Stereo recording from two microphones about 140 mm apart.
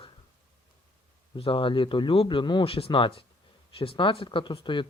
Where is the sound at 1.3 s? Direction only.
40° left (ahead or behind).